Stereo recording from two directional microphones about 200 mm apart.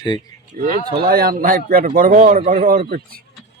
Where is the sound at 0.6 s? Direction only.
45° right (ahead or behind).